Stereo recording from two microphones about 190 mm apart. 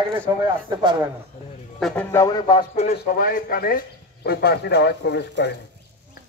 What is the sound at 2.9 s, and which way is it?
Speech, 50° left (ahead or behind).